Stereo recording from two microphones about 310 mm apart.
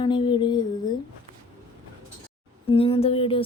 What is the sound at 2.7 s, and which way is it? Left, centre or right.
Speech, centre.